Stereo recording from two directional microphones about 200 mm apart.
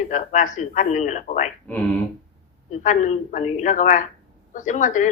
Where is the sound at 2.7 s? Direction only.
40° left (ahead or behind).